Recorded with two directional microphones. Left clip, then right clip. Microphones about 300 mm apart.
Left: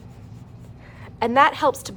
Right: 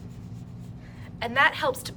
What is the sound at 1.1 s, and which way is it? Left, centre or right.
Speech, centre.